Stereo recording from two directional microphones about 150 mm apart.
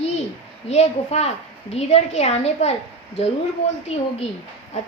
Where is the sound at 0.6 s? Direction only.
45° left (ahead or behind).